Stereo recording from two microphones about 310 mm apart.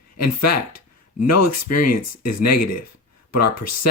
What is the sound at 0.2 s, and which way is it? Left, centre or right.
Speech, left.